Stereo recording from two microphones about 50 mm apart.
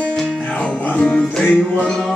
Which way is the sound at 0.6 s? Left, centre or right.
Left.